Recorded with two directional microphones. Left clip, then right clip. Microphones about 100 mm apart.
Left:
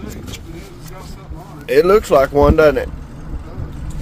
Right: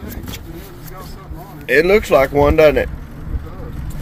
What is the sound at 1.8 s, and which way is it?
Speech, 45° left (ahead or behind).